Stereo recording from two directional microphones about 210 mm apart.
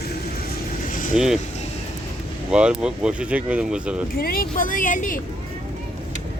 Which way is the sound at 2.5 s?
5° right (ahead or behind).